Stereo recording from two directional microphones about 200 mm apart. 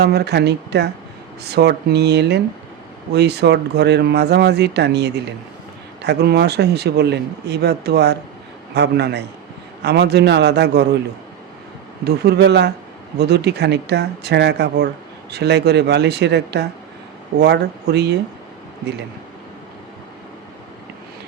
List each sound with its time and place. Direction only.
0.0 s speech: 55° right (ahead or behind)
12.0 s speech: 55° right (ahead or behind)